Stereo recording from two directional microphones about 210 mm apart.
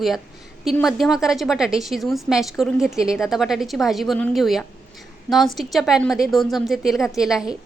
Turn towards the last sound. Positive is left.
turn(degrees=-5)  # may be behind; listen again after turning